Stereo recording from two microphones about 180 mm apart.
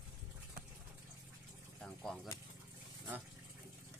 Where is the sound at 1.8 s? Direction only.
5° left (ahead or behind).